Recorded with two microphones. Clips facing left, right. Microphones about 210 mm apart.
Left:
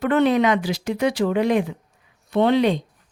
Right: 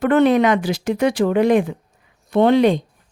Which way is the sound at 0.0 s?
50° right (ahead or behind).